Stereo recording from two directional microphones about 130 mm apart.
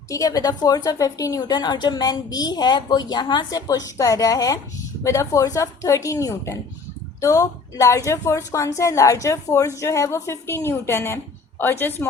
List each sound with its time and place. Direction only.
0.1 s a woman's voice: 30° left (ahead or behind)